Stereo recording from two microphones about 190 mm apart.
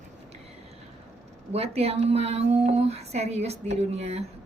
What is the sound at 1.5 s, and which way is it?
Speech, 35° right (ahead or behind).